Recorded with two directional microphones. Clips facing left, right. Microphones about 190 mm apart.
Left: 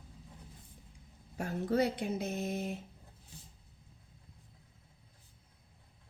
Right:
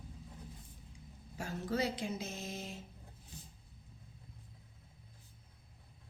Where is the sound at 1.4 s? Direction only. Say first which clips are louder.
Left 5 dB; 55° left (ahead or behind).